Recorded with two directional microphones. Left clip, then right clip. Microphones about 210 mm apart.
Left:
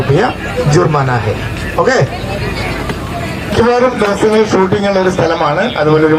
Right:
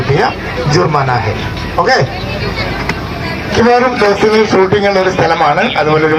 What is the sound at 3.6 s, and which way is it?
A man's voice, 35° right (ahead or behind).